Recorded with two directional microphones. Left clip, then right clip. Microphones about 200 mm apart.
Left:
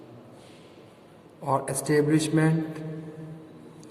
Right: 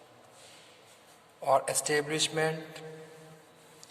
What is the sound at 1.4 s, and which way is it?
A man's voice, 30° right (ahead or behind).